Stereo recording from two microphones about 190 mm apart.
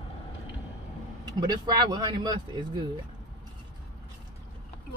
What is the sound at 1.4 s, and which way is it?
Speech, 20° right (ahead or behind).